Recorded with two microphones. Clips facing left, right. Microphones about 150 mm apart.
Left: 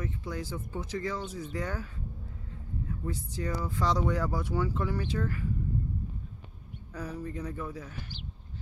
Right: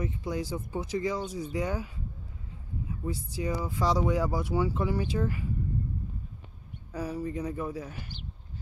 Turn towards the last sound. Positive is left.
turn(degrees=-15)  # may be behind; listen again after turning